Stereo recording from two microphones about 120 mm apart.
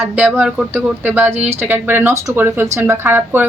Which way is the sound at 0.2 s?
10° right (ahead or behind).